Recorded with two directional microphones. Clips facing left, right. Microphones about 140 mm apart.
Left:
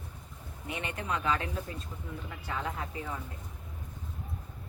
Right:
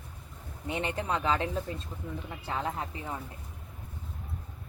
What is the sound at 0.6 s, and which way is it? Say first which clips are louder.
Speech: right 4 dB; 30° right (ahead or behind).